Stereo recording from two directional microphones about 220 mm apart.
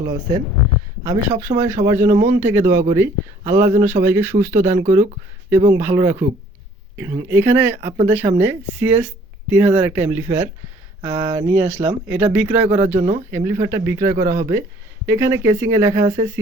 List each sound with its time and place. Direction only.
0.0 s speech: 20° right (ahead or behind)
13.0 s speech: 30° right (ahead or behind)
13.3 s speech: 10° right (ahead or behind)